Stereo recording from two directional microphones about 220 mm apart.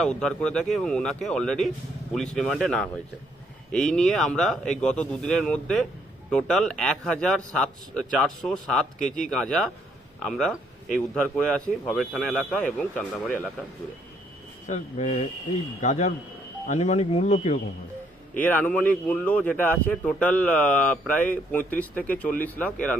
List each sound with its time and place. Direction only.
0.0 s speech: 5° left (ahead or behind)
14.7 s speech: 30° left (ahead or behind)
18.3 s speech: 5° left (ahead or behind)